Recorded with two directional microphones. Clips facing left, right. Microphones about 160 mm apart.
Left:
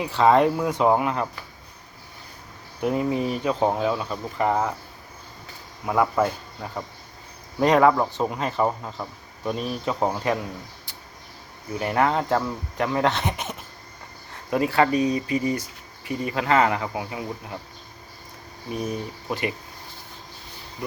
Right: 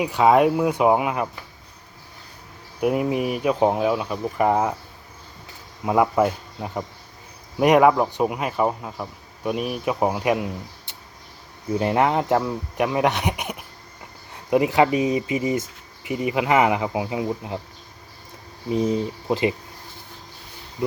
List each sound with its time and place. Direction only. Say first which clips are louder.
0.0 s speech: right 1 dB; 10° right (ahead or behind)
2.8 s speech: right 2 dB; 15° right (ahead or behind)
5.8 s speech: right 3 dB; 20° right (ahead or behind)
18.7 s speech: right 7 dB; 25° right (ahead or behind)